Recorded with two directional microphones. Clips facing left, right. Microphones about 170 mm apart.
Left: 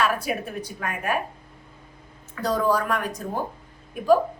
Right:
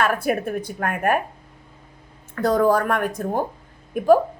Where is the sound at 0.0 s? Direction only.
55° right (ahead or behind).